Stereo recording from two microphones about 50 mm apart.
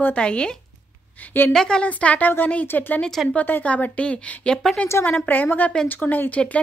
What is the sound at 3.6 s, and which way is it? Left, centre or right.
Speech, left.